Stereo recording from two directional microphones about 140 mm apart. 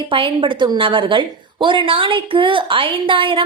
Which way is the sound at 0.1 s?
40° right (ahead or behind).